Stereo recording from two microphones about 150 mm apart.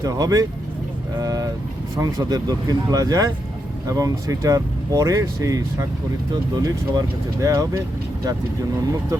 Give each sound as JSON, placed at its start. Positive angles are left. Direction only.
{"t": 0.0, "sound": "speech", "side_deg": -25}
{"t": 1.2, "sound": "vehicle", "side_deg": -25}
{"t": 2.0, "sound": "speech", "side_deg": -25}